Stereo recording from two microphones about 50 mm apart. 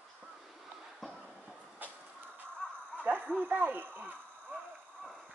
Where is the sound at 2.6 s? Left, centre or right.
Left.